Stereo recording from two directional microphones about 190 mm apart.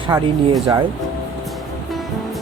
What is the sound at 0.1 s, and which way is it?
Speech, 15° right (ahead or behind).